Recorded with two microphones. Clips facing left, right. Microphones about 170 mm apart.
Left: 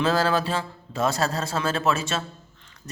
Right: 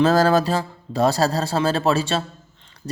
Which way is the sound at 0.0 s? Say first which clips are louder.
Right 6 dB; 40° right (ahead or behind).